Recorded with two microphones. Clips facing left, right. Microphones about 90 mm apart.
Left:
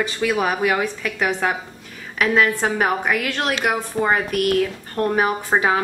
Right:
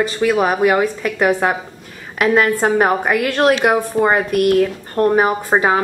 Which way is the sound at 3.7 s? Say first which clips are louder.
Right 5 dB; 15° right (ahead or behind).